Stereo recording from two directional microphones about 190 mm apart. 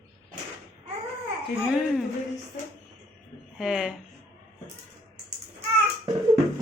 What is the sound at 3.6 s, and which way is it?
Speech, 5° right (ahead or behind).